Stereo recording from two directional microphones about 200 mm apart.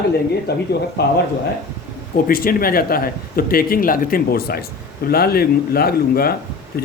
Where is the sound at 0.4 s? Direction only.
55° left (ahead or behind).